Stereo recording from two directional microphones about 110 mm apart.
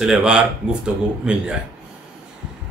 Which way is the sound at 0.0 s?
5° right (ahead or behind).